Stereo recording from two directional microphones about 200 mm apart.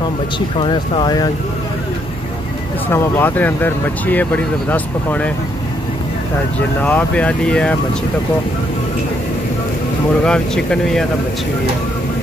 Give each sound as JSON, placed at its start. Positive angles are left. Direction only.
{"t": 0.6, "sound": "speech", "side_deg": 25}
{"t": 2.9, "sound": "speech", "side_deg": 10}
{"t": 6.8, "sound": "speech", "side_deg": 5}
{"t": 10.2, "sound": "speech", "side_deg": 5}